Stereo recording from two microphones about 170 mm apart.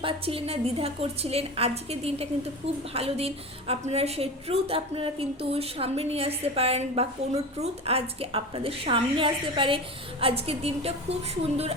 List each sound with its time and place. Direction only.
0.0 s a woman's voice: 35° right (ahead or behind)